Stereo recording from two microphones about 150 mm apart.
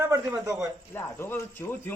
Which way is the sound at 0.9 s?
15° left (ahead or behind).